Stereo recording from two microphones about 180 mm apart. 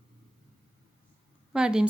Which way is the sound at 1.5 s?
5° right (ahead or behind).